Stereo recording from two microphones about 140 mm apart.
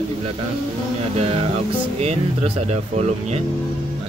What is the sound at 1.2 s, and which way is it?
Speech, 45° right (ahead or behind).